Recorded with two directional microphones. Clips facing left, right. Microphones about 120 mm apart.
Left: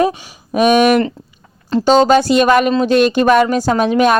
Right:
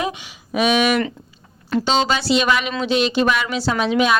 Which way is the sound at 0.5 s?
45° left (ahead or behind).